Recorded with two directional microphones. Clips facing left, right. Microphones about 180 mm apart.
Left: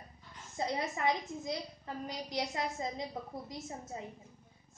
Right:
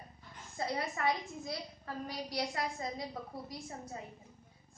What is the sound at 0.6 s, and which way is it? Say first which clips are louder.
A woman's voice: left 1 dB; 20° left (ahead or behind).